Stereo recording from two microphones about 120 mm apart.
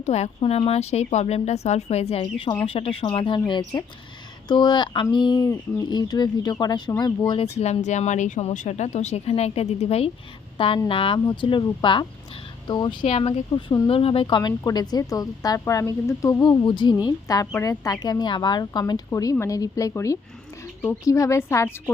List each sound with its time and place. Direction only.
0.0 s speech: 65° left (ahead or behind)
0.3 s a woman's voice: 55° left (ahead or behind); by 7.3 s 35° left (ahead or behind)
7.3 s a woman's voice: 65° left (ahead or behind); by 13.1 s 40° left (ahead or behind)
13.1 s speech: 60° left (ahead or behind)
13.8 s a woman's voice: 50° left (ahead or behind); by 21.7 s 25° left (ahead or behind)